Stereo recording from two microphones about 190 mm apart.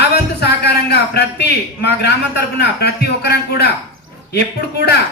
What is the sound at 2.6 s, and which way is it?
A man's voice, 60° left (ahead or behind).